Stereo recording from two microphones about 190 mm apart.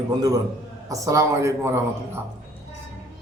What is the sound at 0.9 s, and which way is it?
Speech, 15° right (ahead or behind).